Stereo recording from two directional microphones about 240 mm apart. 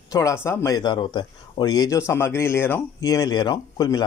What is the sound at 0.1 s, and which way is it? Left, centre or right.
Speech, centre.